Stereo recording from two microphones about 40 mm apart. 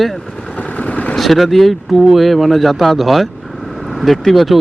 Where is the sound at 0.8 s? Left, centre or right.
Left.